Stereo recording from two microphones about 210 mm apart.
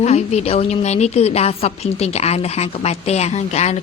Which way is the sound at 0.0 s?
30° left (ahead or behind).